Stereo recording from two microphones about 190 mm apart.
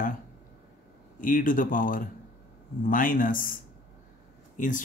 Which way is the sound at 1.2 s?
45° left (ahead or behind).